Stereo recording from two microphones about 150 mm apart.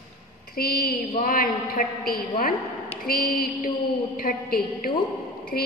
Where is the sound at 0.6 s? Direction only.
90° left.